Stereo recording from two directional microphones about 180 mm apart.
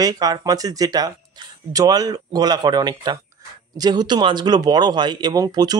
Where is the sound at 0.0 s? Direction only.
20° right (ahead or behind).